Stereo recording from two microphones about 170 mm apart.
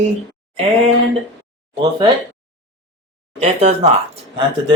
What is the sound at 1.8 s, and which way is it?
Speech, 30° right (ahead or behind).